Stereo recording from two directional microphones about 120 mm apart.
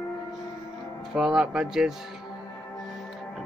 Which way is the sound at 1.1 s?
5° right (ahead or behind).